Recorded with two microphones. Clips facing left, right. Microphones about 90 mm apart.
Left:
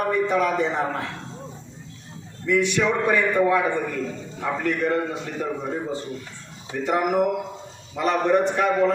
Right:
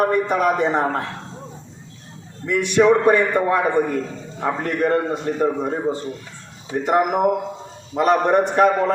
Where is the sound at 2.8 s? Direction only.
35° right (ahead or behind).